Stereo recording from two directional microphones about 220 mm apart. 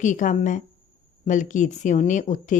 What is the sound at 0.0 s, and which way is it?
A woman's voice, 35° left (ahead or behind).